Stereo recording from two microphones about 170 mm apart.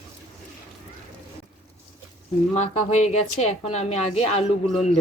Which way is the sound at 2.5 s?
40° left (ahead or behind).